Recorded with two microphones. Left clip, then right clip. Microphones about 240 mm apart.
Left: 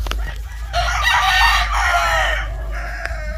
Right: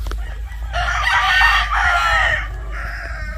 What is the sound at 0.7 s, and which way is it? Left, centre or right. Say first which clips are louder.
Chicken: left 1 dB; left.